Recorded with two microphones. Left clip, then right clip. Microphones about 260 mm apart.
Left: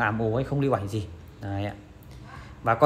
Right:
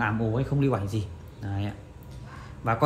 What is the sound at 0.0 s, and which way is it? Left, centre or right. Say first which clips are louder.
A man's voice: left 2 dB; left.